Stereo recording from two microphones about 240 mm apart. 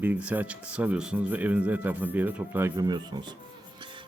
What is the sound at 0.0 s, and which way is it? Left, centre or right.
Speech, centre.